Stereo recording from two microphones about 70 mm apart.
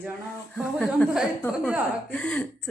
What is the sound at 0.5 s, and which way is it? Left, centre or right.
Speech, centre.